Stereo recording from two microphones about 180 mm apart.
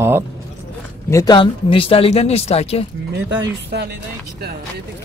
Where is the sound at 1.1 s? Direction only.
20° left (ahead or behind).